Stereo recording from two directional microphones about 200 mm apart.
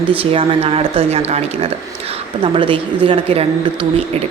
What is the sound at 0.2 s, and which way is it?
A woman's voice, 30° right (ahead or behind).